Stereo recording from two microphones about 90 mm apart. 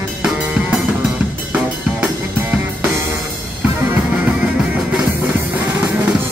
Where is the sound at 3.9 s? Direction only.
15° right (ahead or behind).